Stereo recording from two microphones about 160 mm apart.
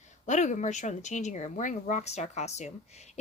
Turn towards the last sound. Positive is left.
turn(degrees=45)  # may be behind; listen again after turning